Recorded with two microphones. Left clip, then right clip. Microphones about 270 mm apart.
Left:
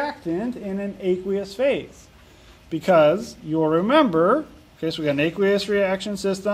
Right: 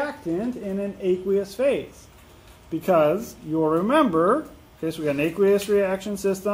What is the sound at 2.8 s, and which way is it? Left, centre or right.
Speech, left.